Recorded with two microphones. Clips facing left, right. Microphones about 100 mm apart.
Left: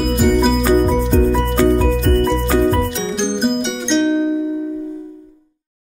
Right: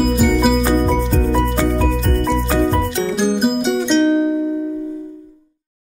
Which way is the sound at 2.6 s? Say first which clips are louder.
Left 1 dB; centre (ahead or behind).